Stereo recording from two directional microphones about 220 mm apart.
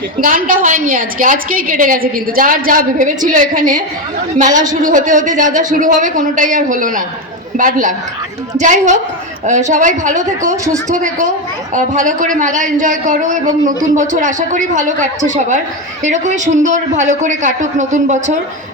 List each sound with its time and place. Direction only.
0.2 s a woman's voice: 35° right (ahead or behind)
10.4 s speech: 15° right (ahead or behind)
10.9 s a woman's voice: 35° right (ahead or behind)